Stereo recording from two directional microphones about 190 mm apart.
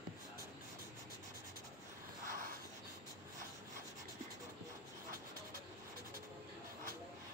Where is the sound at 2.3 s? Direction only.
45° right (ahead or behind).